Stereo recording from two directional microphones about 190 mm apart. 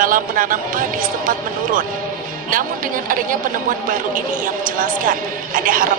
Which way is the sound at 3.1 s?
45° right (ahead or behind).